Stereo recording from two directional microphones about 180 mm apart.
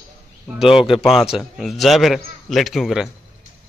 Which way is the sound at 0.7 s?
Centre (ahead or behind).